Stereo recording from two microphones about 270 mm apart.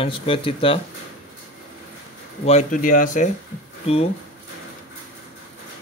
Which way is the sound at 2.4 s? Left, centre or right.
Left.